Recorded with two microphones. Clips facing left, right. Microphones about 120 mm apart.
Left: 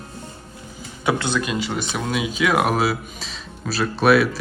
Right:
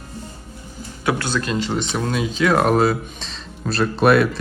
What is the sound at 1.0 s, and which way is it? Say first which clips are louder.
Speech: even; 20° left (ahead or behind).